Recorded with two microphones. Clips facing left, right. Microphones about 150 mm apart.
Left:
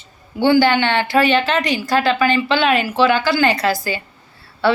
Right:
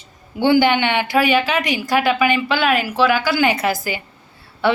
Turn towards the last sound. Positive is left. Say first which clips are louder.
# left 1 dB
turn(degrees=-15)  # may be behind; listen again after turning